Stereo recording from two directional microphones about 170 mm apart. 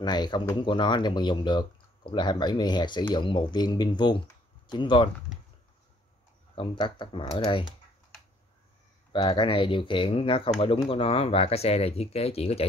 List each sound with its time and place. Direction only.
0.0 s speech: 25° left (ahead or behind)
6.5 s speech: 30° left (ahead or behind)
9.1 s speech: 30° left (ahead or behind)